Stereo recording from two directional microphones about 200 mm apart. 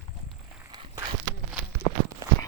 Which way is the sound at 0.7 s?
20° right (ahead or behind).